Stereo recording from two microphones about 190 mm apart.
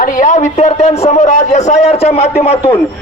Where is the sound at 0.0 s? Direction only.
40° left (ahead or behind).